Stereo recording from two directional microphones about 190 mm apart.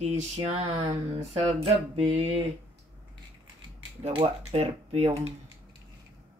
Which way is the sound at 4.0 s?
30° right (ahead or behind).